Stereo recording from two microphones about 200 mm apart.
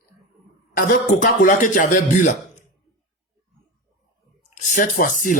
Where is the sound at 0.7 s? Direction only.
40° left (ahead or behind).